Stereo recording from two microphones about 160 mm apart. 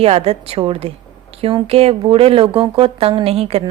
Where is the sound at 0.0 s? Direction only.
40° right (ahead or behind).